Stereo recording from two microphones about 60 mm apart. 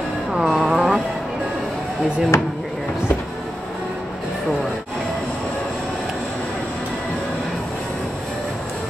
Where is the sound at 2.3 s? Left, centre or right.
Left.